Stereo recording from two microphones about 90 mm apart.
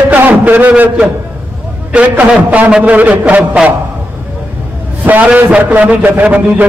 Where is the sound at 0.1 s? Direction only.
20° right (ahead or behind).